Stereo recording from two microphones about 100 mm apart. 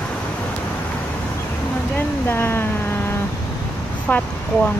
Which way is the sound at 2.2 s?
25° left (ahead or behind).